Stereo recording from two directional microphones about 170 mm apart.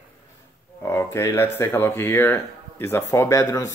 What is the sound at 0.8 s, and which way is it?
Speech, 15° left (ahead or behind).